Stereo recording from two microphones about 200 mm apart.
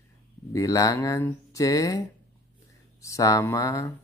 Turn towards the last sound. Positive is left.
turn(degrees=15)  # may be behind; listen again after turning